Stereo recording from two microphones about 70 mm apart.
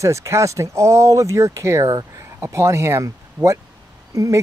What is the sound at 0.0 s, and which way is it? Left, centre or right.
Speech, right.